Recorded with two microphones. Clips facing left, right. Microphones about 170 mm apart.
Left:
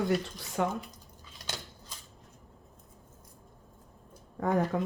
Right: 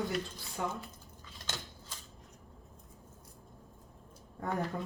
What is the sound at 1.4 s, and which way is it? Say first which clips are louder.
Scissors: left 2 dB; 15° left (ahead or behind).